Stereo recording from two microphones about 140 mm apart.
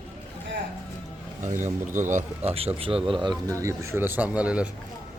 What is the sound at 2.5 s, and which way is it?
Speech, 45° right (ahead or behind).